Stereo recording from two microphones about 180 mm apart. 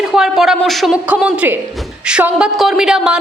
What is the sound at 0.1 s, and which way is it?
A woman's voice, centre (ahead or behind).